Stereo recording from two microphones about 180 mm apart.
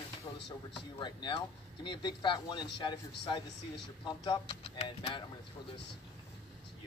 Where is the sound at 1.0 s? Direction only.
25° left (ahead or behind).